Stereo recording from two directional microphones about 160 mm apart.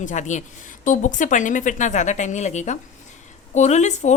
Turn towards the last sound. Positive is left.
turn(degrees=45)  # may be behind; listen again after turning